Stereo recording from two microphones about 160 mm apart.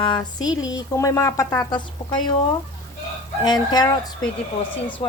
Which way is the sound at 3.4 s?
25° left (ahead or behind).